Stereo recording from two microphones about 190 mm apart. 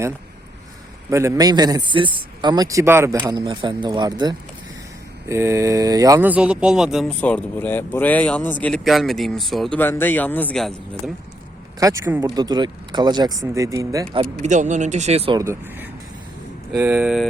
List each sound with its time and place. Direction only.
1.1 s a man's voice: 15° right (ahead or behind); by 11.1 s centre (ahead or behind)
11.8 s speech: 20° right (ahead or behind)
14.4 s speech: 40° right (ahead or behind)
15.4 s speech: 10° right (ahead or behind)